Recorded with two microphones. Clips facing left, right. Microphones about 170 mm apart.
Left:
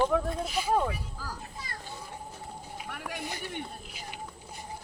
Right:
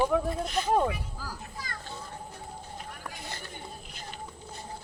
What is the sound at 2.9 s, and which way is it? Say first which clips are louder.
Run: left 4 dB; 70° left (ahead or behind).